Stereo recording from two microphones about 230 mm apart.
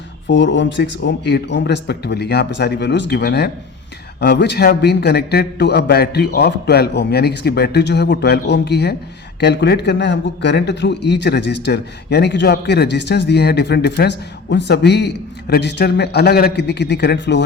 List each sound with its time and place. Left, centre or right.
0.3 s a man's voice: left